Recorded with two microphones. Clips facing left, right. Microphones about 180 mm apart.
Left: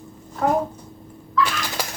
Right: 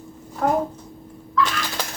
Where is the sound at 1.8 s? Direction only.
10° left (ahead or behind).